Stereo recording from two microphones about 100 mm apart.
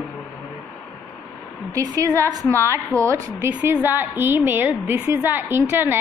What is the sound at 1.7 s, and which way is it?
A woman's voice, 35° right (ahead or behind).